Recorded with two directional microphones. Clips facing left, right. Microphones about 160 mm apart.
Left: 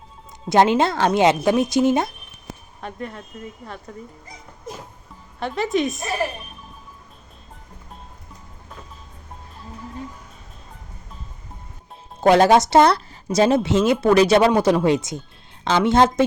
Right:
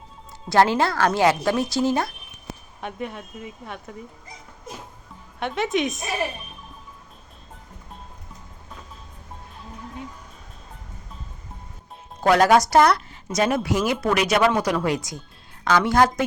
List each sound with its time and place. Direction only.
0.4 s speech: 20° left (ahead or behind)
2.8 s speech: 10° right (ahead or behind)
5.4 s speech: centre (ahead or behind)
12.2 s speech: 25° left (ahead or behind)